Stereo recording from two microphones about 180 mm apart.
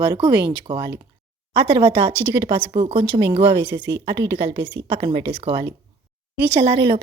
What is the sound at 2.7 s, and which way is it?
Speech, 30° right (ahead or behind).